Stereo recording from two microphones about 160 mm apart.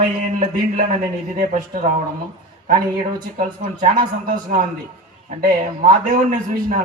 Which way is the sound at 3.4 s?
55° right (ahead or behind).